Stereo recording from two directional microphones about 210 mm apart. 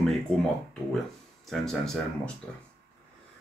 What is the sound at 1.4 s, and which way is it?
Speech, centre (ahead or behind).